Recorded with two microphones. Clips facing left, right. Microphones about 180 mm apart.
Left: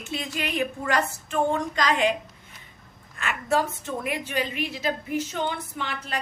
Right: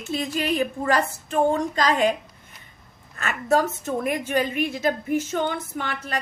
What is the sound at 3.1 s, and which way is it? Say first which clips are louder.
A woman's voice: right 3 dB; 40° right (ahead or behind).